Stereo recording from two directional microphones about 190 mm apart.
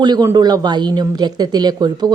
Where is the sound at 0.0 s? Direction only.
20° right (ahead or behind).